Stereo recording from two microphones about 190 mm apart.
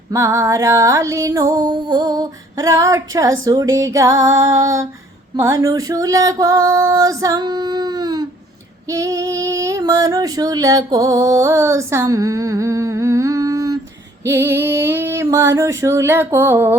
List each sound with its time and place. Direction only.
0.1 s female singing: 15° right (ahead or behind)
3.4 s speech: 20° right (ahead or behind)
3.8 s female singing: 15° right (ahead or behind)